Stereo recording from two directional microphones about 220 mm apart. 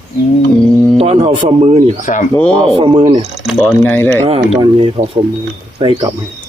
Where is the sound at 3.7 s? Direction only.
10° left (ahead or behind).